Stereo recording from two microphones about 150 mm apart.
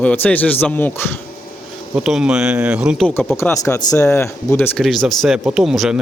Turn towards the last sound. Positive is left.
turn(degrees=-5)  # may be behind; listen again after turning